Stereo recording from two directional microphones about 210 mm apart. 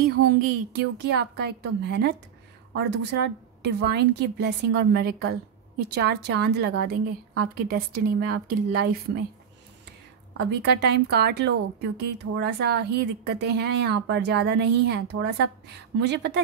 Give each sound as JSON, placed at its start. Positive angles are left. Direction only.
{"t": 0.4, "sound": "a woman's voice", "side_deg": -50}
{"t": 10.3, "sound": "a woman's voice", "side_deg": -55}